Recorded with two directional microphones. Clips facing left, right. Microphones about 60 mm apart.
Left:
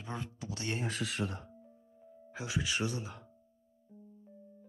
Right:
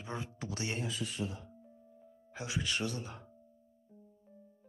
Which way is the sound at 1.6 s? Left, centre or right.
Centre.